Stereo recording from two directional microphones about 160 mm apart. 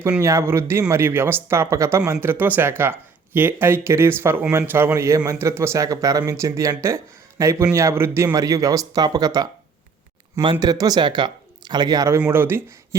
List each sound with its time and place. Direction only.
0.0 s speech: 15° right (ahead or behind)